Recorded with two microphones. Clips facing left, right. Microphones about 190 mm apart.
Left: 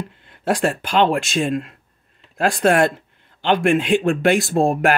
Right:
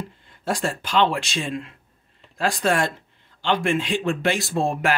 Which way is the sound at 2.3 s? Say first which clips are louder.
Left 6 dB; 60° left (ahead or behind).